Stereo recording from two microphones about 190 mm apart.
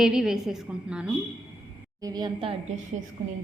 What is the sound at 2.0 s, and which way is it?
Speech, 20° right (ahead or behind).